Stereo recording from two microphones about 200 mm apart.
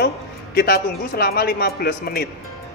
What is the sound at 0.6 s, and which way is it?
Speech, 50° left (ahead or behind).